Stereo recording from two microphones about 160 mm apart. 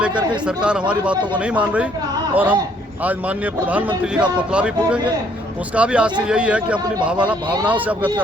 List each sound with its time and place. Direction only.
0.0 s a man's voice: 10° right (ahead or behind)
1.1 s a man's voice: 30° right (ahead or behind)
1.4 s a man's voice: 10° right (ahead or behind)
7.4 s a man's voice: 30° right (ahead or behind)
7.7 s a man's voice: 10° right (ahead or behind)